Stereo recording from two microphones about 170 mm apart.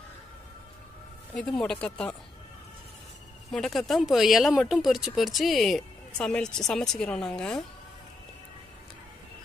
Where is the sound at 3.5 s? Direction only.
Centre (ahead or behind).